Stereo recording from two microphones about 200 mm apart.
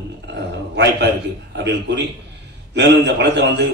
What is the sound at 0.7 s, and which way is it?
A man's voice, 60° right (ahead or behind).